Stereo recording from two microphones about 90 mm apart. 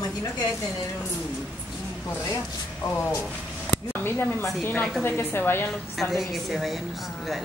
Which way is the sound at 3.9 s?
25° left (ahead or behind).